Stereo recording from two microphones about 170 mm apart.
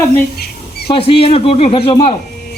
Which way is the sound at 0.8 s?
35° left (ahead or behind).